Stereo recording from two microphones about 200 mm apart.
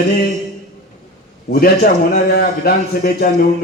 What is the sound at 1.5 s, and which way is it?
A man's voice, 50° left (ahead or behind).